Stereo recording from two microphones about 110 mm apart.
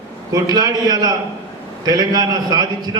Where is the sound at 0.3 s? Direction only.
40° right (ahead or behind).